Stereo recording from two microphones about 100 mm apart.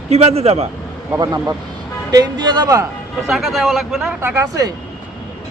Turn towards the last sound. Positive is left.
turn(degrees=-35)  # may be behind; listen again after turning